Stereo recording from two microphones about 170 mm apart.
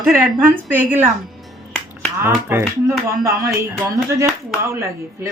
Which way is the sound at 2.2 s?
15° right (ahead or behind).